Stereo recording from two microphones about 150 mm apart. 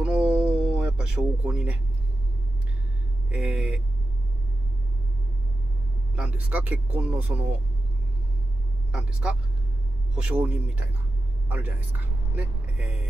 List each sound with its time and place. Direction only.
0.0 s a sound: 10° right (ahead or behind)
3.3 s speech: 5° right (ahead or behind)
6.1 s speech: 10° right (ahead or behind)
10.1 s speech: 10° right (ahead or behind)